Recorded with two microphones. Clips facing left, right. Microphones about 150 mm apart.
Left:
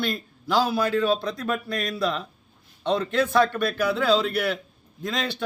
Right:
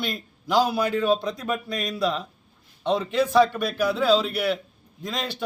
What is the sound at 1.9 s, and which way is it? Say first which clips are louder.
A man's voice: right 3 dB; 5° right (ahead or behind).